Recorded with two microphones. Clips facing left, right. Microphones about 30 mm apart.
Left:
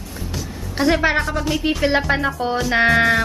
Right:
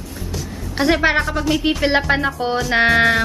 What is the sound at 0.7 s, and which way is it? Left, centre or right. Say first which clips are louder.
Music: right 1 dB; centre.